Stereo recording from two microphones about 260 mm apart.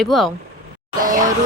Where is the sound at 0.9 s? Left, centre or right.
Right.